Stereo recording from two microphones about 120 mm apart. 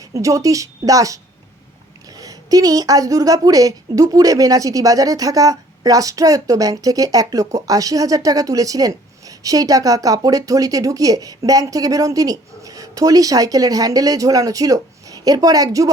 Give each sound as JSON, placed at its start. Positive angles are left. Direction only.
{"t": 0.0, "sound": "a woman's voice", "side_deg": -25}